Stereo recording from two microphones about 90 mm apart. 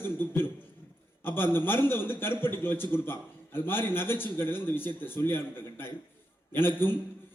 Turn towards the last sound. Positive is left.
turn(degrees=25)  # may be behind; listen again after turning